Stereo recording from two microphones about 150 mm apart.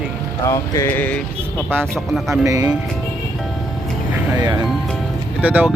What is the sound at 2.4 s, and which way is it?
Speech, 20° right (ahead or behind).